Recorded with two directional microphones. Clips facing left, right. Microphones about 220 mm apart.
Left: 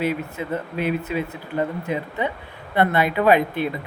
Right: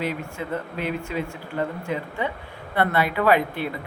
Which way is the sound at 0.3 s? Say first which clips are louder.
Left 3 dB; 15° left (ahead or behind).